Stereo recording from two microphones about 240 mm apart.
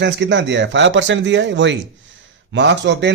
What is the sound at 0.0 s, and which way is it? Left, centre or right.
A man's voice, right.